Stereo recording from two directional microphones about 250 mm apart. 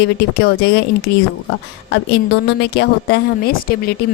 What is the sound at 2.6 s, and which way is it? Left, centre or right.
A woman's voice, left.